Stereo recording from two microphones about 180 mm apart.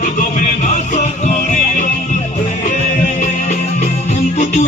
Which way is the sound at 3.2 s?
45° left (ahead or behind).